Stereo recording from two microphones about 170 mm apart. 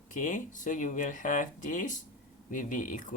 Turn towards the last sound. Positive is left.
turn(degrees=50)  # may be behind; listen again after turning